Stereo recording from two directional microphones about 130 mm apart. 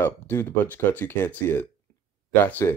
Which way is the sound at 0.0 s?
20° left (ahead or behind).